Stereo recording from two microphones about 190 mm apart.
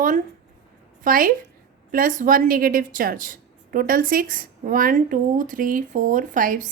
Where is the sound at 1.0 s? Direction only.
45° right (ahead or behind).